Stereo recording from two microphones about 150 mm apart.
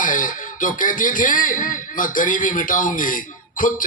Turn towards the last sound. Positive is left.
turn(degrees=65)  # may be behind; listen again after turning